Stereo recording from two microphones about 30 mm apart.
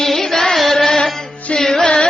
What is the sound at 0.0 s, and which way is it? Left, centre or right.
Chant, centre.